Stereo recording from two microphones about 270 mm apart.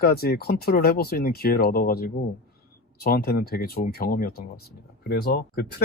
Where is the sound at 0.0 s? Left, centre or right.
Left.